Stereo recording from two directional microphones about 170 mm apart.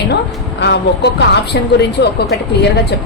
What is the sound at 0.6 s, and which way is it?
A woman's voice, 90° left.